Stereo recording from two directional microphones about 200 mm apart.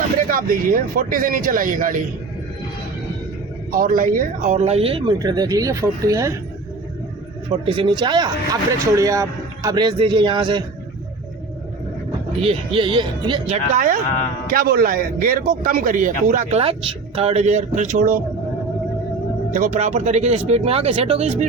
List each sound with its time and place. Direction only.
0.3 s a man's voice: 45° right (ahead or behind)
3.7 s speech: 45° right (ahead or behind); by 6.4 s 15° right (ahead or behind)
7.5 s a man's voice: 25° right (ahead or behind)
12.4 s speech: 25° right (ahead or behind)
13.7 s a man's voice: 40° right (ahead or behind)
19.5 s speech: 40° right (ahead or behind)